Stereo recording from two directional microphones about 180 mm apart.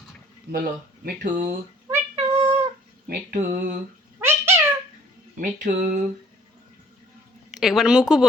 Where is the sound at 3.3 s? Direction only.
55° right (ahead or behind).